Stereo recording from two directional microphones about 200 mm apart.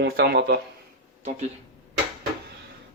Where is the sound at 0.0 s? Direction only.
55° right (ahead or behind).